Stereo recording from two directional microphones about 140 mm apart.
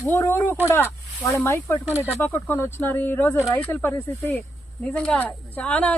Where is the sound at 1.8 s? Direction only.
15° right (ahead or behind).